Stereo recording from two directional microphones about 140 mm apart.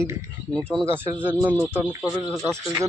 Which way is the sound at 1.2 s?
15° right (ahead or behind).